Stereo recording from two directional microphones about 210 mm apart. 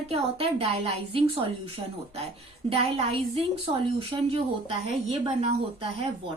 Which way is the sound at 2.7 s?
30° right (ahead or behind).